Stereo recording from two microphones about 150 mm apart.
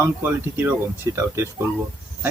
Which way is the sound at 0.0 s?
15° right (ahead or behind).